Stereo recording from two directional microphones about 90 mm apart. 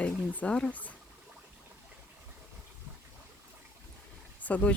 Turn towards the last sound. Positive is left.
turn(degrees=15)  # may be behind; listen again after turning